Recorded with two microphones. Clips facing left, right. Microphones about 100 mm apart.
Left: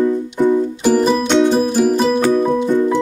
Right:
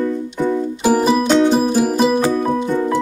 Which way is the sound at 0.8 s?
10° right (ahead or behind).